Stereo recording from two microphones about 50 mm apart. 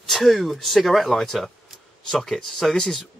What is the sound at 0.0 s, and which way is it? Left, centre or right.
Speech, centre.